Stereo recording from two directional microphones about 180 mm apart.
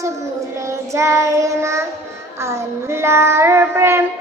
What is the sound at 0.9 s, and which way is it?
Child singing, 15° right (ahead or behind).